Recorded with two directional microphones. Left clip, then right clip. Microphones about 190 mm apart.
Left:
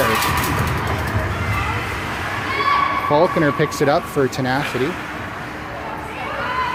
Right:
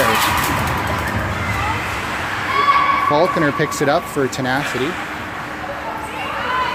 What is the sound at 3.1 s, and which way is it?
Speech, 5° left (ahead or behind).